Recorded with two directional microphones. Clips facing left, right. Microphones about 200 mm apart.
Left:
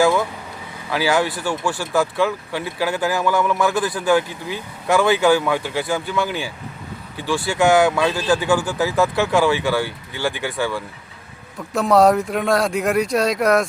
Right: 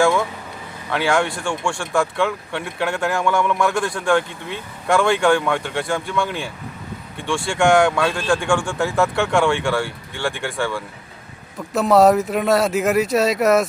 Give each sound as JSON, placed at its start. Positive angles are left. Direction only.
{"t": 0.0, "sound": "speech", "side_deg": 0}